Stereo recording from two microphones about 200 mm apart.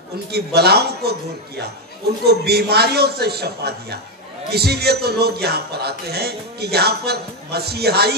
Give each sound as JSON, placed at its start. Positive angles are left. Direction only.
{"t": 0.3, "sound": "a man's voice", "side_deg": -55}
{"t": 2.2, "sound": "a man's voice", "side_deg": -55}